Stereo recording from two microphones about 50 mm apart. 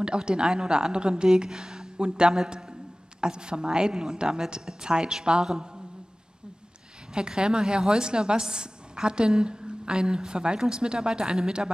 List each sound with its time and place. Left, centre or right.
0.0 s a woman's voice: centre
7.2 s a woman's voice: centre